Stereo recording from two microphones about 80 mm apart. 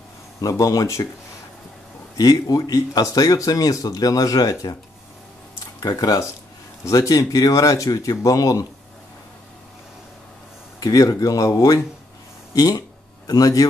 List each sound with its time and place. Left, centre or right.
0.4 s speech: left
2.1 s speech: left
5.8 s speech: left
10.8 s speech: left